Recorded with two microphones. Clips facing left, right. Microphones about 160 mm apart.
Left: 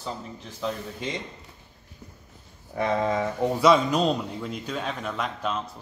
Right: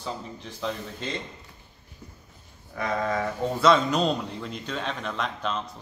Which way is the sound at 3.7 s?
5° left (ahead or behind).